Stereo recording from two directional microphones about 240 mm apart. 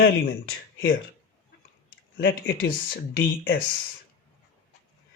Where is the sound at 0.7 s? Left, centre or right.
Left.